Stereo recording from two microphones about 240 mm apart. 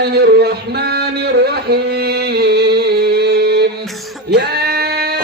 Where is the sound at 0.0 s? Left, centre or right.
Right.